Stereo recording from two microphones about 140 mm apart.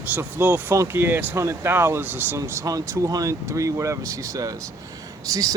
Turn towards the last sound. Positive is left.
turn(degrees=-25)  # may be behind; listen again after turning